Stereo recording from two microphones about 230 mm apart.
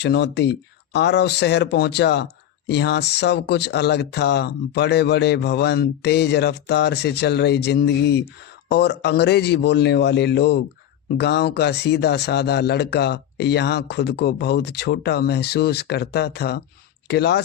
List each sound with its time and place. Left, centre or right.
0.0 s speech: left